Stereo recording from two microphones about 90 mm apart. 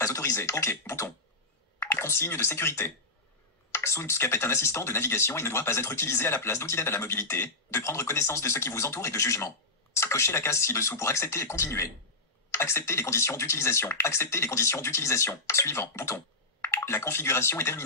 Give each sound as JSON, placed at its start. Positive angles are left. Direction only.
{"t": 0.0, "sound": "speech", "side_deg": 35}